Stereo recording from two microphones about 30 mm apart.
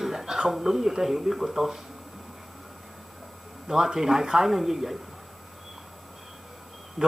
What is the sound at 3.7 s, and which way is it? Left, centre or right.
Speech, centre.